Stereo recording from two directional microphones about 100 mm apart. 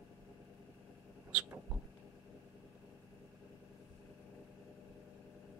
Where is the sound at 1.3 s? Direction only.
15° right (ahead or behind).